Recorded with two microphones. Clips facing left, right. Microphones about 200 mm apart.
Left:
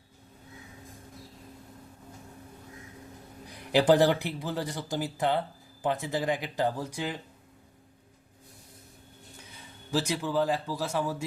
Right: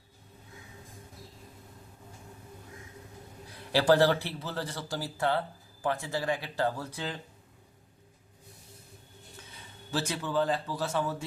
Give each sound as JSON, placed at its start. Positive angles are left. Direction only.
{"t": 3.5, "sound": "speech", "side_deg": 15}
{"t": 9.9, "sound": "speech", "side_deg": 10}